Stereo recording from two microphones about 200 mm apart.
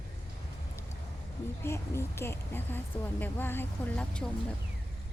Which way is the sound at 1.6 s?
10° left (ahead or behind).